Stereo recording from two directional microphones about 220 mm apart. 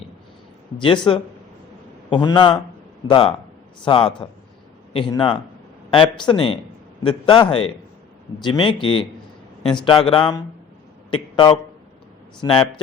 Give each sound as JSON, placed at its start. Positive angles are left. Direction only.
{"t": 0.8, "sound": "a man's voice", "side_deg": 20}